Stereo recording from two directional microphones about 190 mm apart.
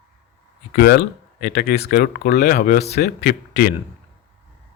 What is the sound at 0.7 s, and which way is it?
Speech, 55° left (ahead or behind).